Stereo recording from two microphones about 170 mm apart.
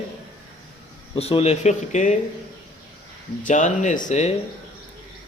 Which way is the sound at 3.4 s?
45° left (ahead or behind).